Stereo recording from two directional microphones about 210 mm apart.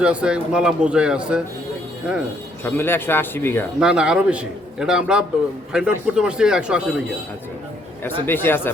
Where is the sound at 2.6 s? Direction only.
10° left (ahead or behind).